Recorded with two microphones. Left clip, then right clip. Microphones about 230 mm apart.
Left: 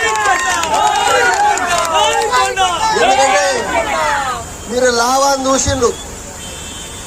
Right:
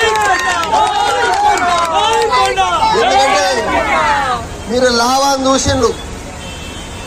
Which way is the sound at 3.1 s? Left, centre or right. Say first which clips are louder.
Right 1 dB; right.